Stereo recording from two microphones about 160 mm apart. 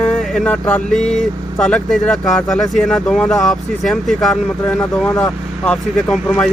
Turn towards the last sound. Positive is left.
turn(degrees=5)  # may be behind; listen again after turning